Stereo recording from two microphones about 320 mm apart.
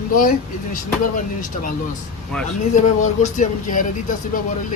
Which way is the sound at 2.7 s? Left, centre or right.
Left.